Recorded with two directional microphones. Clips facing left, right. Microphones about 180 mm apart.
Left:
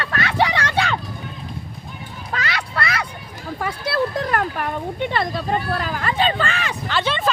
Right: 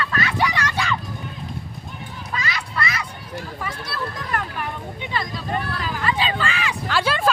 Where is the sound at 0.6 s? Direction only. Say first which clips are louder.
Left 3 dB; 60° left (ahead or behind).